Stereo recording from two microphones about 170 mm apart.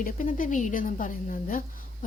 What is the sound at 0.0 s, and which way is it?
A woman's voice, 50° left (ahead or behind).